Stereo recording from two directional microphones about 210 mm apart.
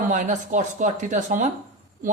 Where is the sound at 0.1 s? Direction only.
35° right (ahead or behind).